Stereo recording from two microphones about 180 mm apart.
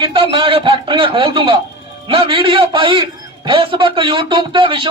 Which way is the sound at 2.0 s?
30° right (ahead or behind).